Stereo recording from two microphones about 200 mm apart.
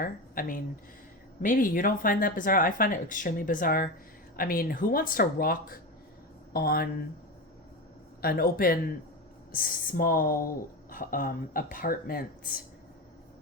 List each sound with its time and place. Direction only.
0.0 s speech: 45° left (ahead or behind)
8.2 s speech: 50° left (ahead or behind)